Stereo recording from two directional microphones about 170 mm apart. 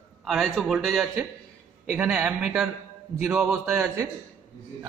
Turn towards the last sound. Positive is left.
turn(degrees=-15)  # may be behind; listen again after turning